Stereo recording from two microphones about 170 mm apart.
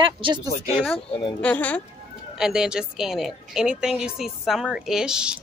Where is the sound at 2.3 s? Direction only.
5° right (ahead or behind).